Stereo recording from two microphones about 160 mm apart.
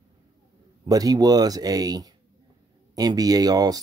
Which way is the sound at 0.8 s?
25° right (ahead or behind).